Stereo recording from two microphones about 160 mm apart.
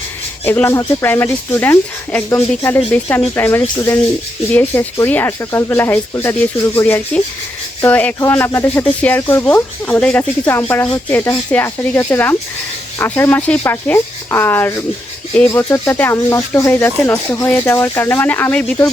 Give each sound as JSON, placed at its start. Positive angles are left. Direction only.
{"t": 0.4, "sound": "speech", "side_deg": 15}